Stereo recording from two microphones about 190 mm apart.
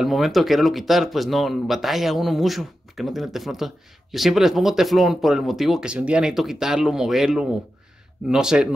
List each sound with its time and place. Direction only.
0.0 s speech: centre (ahead or behind)